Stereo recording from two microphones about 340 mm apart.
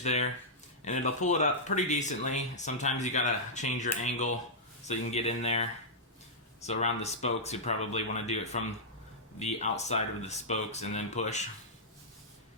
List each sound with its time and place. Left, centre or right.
0.0 s speech: centre